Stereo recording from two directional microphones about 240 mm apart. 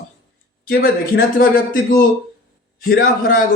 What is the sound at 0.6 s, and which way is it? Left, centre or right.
Speech, left.